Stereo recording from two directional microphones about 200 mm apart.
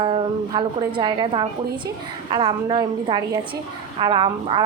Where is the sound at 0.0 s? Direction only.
25° right (ahead or behind).